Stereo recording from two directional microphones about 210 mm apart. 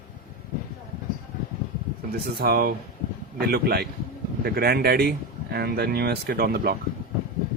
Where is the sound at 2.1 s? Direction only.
45° right (ahead or behind).